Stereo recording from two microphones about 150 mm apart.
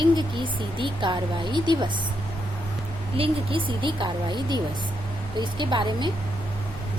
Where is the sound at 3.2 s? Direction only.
35° right (ahead or behind).